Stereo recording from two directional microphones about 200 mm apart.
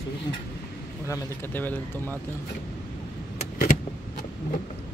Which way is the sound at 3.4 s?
35° left (ahead or behind).